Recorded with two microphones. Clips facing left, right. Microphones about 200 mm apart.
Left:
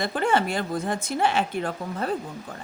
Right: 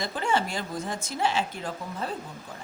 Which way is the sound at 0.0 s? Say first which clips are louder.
Left 4 dB; 60° left (ahead or behind).